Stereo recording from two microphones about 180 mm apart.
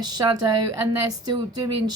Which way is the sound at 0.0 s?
25° right (ahead or behind).